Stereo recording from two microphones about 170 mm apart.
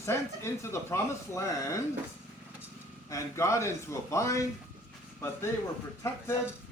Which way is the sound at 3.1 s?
15° left (ahead or behind).